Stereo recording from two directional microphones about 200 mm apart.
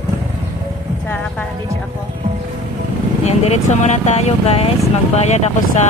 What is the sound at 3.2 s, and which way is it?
Speech, 35° left (ahead or behind).